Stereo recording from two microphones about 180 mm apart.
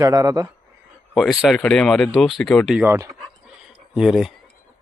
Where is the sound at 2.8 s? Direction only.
15° right (ahead or behind).